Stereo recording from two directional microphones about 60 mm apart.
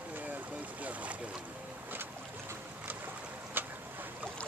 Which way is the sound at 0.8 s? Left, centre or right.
Right.